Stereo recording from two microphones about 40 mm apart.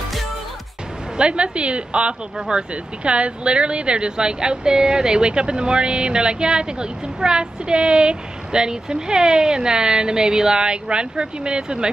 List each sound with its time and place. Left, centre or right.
1.1 s speech: right